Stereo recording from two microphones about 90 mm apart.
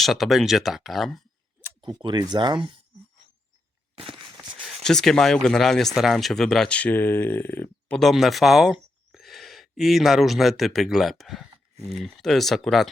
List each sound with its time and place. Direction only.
0.0 s speech: centre (ahead or behind)
1.8 s speech: 60° right (ahead or behind)
3.9 s a sound: 85° right
4.4 s speech: 5° left (ahead or behind); by 7.9 s 20° left (ahead or behind)
7.9 s speech: centre (ahead or behind)